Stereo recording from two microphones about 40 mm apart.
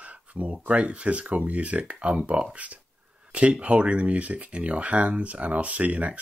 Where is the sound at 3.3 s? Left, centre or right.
Right.